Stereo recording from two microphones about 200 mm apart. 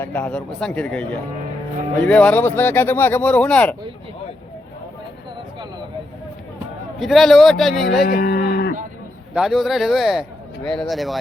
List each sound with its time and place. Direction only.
0.0 s speech: 5° left (ahead or behind)
2.0 s speech: 5° left (ahead or behind)
7.0 s speech: centre (ahead or behind)
8.0 s a sound: 50° left (ahead or behind)
9.3 s speech: centre (ahead or behind)